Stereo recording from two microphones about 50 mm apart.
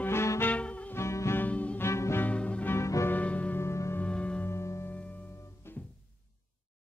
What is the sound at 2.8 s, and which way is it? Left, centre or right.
Music, left.